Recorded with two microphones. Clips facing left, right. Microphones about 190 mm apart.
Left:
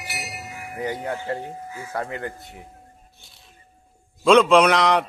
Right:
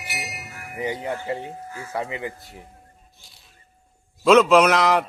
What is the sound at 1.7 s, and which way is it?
Speech, 10° left (ahead or behind).